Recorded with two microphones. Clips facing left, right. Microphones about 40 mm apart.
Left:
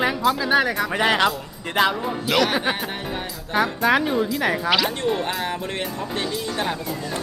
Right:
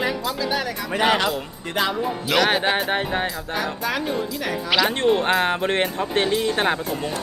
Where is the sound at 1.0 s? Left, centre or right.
Centre.